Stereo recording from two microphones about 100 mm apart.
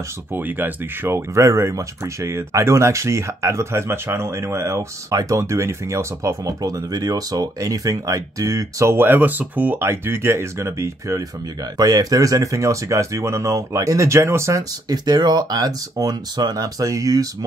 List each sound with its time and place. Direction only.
0.3 s speech: 20° right (ahead or behind)
11.7 s speech: 40° right (ahead or behind)